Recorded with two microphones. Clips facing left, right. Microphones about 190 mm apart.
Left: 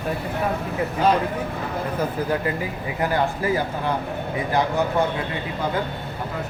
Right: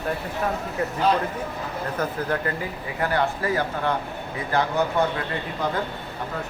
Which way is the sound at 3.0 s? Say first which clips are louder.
Left 1 dB; 15° left (ahead or behind).